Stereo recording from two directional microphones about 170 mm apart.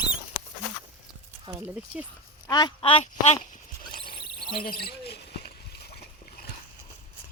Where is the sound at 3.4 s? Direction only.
50° left (ahead or behind).